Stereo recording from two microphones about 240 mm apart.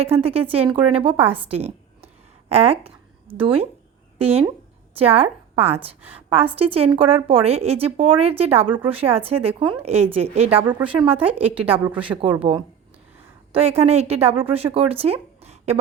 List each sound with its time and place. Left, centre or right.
0.2 s a woman's voice: right